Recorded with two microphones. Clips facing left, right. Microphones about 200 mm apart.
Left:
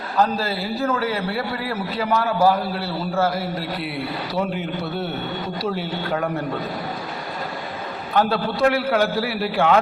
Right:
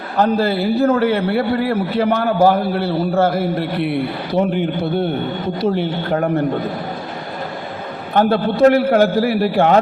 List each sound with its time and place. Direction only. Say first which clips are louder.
0.2 s a man's voice: right 6 dB; 60° right (ahead or behind)
8.1 s a man's voice: right 5 dB; 55° right (ahead or behind)